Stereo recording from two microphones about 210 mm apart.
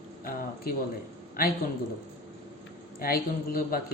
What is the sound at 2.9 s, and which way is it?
Speech, 45° left (ahead or behind).